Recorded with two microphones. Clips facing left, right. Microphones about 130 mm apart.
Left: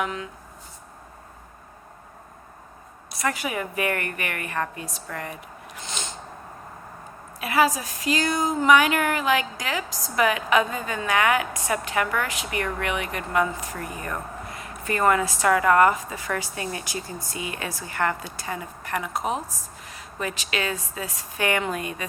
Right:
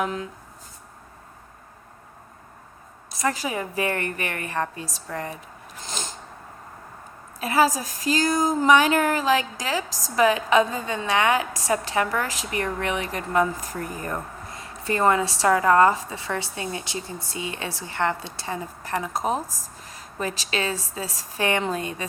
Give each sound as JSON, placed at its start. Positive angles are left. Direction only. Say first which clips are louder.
{"t": 0.0, "sound": "speech", "louder": "right 2 dB", "side_deg": -35}
{"t": 3.2, "sound": "speech", "louder": "right 1 dB", "side_deg": -30}
{"t": 5.8, "sound": "snort", "louder": "right 1 dB", "side_deg": -40}
{"t": 7.3, "sound": "a woman's voice", "louder": "right 1 dB", "side_deg": -35}